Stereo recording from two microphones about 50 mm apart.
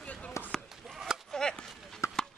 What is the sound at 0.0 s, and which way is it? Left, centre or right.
Basketball bounce, left.